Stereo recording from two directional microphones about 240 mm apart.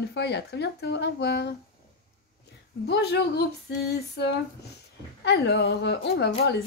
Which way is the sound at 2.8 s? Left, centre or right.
Left.